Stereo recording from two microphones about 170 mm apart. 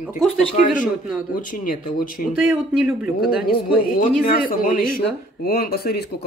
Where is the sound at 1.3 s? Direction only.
55° left (ahead or behind).